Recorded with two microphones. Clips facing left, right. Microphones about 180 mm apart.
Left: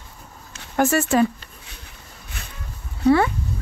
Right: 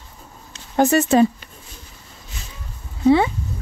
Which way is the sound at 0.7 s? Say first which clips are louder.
Right 3 dB; 20° right (ahead or behind).